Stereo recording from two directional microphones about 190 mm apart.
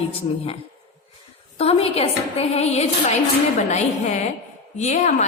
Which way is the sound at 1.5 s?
30° left (ahead or behind).